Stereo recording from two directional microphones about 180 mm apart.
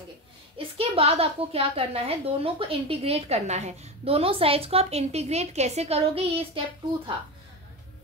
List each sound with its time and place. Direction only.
0.6 s a woman's voice: 30° right (ahead or behind)